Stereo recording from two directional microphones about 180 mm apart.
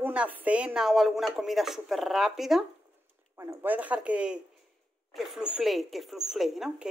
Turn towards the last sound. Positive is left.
turn(degrees=0)  # may be behind; listen again after turning